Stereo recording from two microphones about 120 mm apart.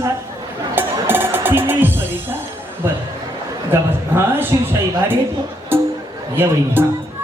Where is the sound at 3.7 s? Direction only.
20° right (ahead or behind).